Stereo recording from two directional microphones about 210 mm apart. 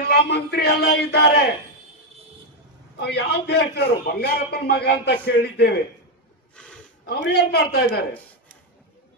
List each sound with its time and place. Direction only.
0.1 s a man's voice: 50° left (ahead or behind)
3.0 s a man's voice: 50° left (ahead or behind)
6.5 s gasp: 5° left (ahead or behind)
7.1 s a man's voice: 50° left (ahead or behind)